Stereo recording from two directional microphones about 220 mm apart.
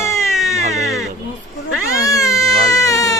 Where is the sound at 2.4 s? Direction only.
15° left (ahead or behind).